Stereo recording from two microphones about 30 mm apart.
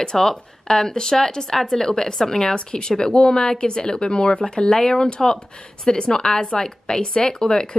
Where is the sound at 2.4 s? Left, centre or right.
Left.